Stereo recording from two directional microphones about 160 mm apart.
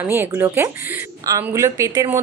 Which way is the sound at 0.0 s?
15° right (ahead or behind).